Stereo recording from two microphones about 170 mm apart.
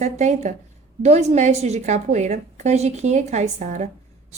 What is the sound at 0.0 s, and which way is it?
A woman's voice, 45° right (ahead or behind).